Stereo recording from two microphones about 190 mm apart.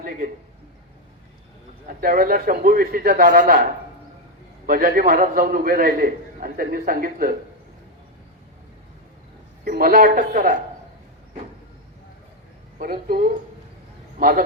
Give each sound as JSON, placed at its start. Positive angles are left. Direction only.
{"t": 2.0, "sound": "a man's voice", "side_deg": -50}
{"t": 9.6, "sound": "a man's voice", "side_deg": -50}
{"t": 12.8, "sound": "a man's voice", "side_deg": -50}